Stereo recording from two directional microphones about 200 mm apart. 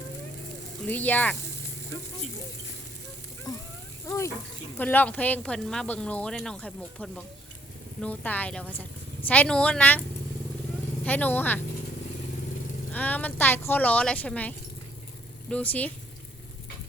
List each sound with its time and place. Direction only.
0.9 s a woman's voice: 10° left (ahead or behind)
4.0 s a woman's voice: 15° left (ahead or behind)
11.0 s a woman's voice: 10° left (ahead or behind)
12.9 s a woman's voice: 10° left (ahead or behind)